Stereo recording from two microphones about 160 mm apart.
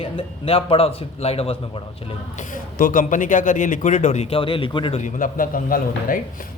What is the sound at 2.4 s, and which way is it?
A man's voice, 55° left (ahead or behind).